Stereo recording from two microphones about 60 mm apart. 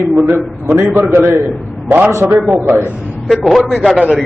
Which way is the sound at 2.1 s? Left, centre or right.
Right.